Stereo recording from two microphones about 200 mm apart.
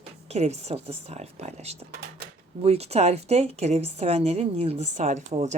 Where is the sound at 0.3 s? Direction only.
30° right (ahead or behind).